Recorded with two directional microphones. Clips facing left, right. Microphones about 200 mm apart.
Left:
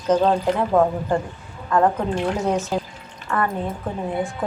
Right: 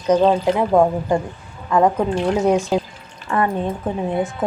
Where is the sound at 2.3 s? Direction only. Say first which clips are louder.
Right 5 dB; 15° right (ahead or behind).